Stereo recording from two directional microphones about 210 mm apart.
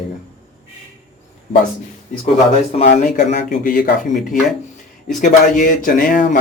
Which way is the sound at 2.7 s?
35° left (ahead or behind).